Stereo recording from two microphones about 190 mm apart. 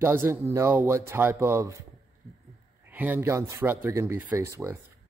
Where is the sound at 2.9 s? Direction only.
10° right (ahead or behind).